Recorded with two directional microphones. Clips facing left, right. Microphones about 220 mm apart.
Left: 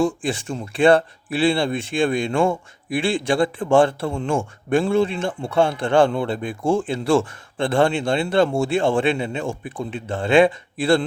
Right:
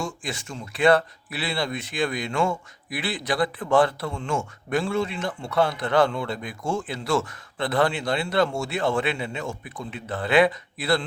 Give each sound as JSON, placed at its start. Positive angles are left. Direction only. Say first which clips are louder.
{"t": 0.0, "sound": "speech", "louder": "left 10 dB", "side_deg": 30}